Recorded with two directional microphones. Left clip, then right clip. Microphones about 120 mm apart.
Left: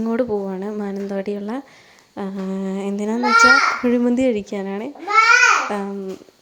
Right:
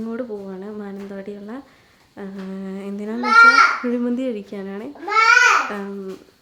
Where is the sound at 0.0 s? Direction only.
50° left (ahead or behind); by 4.9 s 30° left (ahead or behind).